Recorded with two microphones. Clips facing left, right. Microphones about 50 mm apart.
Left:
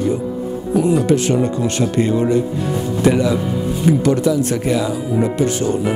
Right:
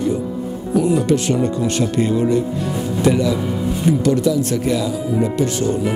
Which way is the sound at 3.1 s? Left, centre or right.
Centre.